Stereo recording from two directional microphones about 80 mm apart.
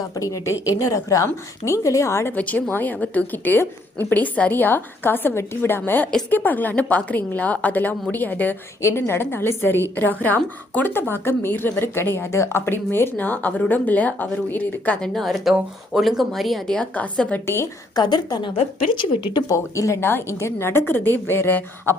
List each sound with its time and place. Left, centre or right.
0.1 s a woman's voice: left
2.3 s speech: centre
8.8 s speech: left
15.0 s speech: centre
16.9 s a woman's voice: centre
17.4 s a woman's voice: left
17.9 s a woman's voice: left
18.9 s speech: left
19.5 s speech: left